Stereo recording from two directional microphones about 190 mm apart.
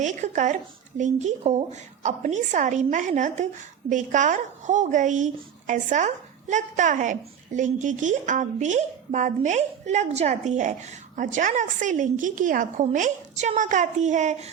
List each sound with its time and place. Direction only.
0.0 s a woman's voice: 40° right (ahead or behind)